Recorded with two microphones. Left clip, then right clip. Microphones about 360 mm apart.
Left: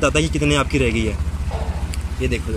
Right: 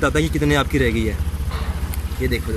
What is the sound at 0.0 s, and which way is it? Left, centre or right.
Speech, centre.